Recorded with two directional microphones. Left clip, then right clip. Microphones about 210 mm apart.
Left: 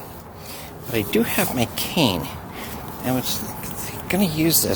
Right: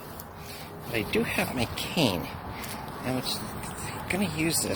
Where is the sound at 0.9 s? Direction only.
25° left (ahead or behind).